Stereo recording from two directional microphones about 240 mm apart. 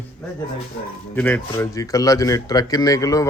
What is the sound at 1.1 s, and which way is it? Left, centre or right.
Speech, centre.